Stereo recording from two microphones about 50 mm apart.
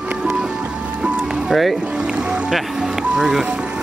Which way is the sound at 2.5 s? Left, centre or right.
Centre.